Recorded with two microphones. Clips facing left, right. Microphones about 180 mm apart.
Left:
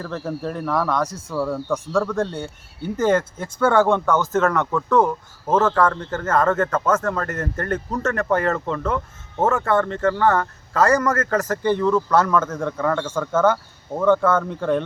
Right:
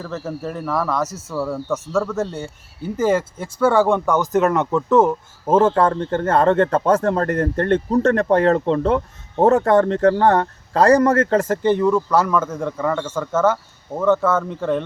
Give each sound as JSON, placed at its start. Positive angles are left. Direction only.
{"t": 0.0, "sound": "a man's voice", "side_deg": 0}